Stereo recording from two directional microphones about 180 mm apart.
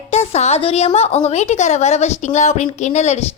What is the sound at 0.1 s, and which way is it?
A woman's voice, 35° left (ahead or behind).